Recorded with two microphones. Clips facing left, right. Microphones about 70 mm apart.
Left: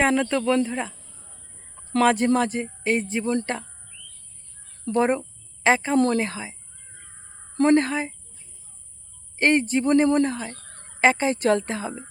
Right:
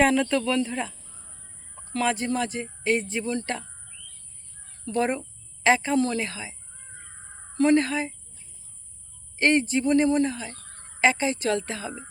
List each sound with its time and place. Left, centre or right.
0.0 s speech: left
1.9 s speech: left
4.9 s a woman's voice: left
6.0 s a woman's voice: left
9.4 s a woman's voice: left